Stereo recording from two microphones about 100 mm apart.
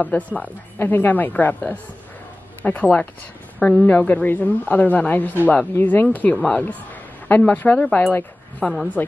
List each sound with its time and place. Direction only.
0.0 s a woman's voice: 15° left (ahead or behind)